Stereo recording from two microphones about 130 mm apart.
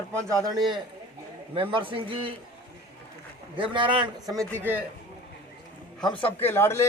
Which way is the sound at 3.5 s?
40° right (ahead or behind).